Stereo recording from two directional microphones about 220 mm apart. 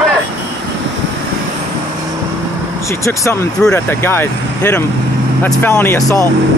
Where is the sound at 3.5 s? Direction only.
5° left (ahead or behind).